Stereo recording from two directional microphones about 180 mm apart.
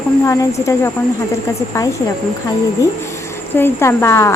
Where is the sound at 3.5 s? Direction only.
10° left (ahead or behind).